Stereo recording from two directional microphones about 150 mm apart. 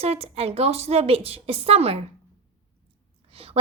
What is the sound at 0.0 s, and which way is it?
A woman's voice, 40° right (ahead or behind).